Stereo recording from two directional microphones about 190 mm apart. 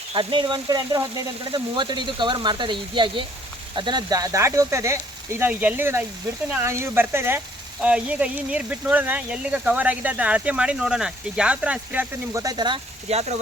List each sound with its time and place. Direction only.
0.1 s speech: 25° right (ahead or behind)